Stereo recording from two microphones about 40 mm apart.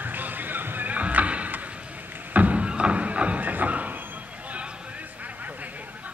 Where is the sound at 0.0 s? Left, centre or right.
Right.